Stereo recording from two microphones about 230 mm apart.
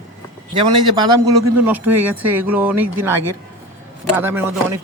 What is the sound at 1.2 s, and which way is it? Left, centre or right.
Speech, centre.